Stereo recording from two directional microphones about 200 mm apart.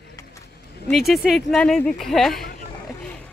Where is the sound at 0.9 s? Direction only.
Centre (ahead or behind).